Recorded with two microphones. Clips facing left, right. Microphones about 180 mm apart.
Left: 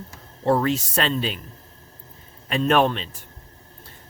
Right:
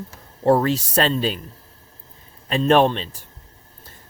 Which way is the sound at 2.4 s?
35° right (ahead or behind).